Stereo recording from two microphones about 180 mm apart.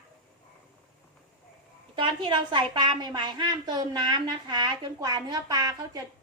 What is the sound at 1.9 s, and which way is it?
A woman's voice, 25° right (ahead or behind).